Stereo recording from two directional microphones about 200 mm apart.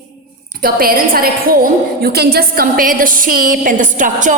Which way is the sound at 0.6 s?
45° right (ahead or behind).